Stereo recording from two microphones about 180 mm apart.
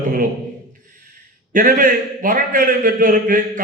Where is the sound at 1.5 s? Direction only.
50° right (ahead or behind).